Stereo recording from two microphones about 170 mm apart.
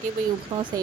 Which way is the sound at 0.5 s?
40° right (ahead or behind).